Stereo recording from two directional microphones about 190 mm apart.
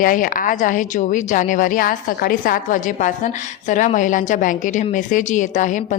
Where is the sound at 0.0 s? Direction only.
45° left (ahead or behind).